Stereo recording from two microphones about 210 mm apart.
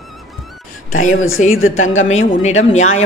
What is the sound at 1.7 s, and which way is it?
A man's voice, 35° left (ahead or behind).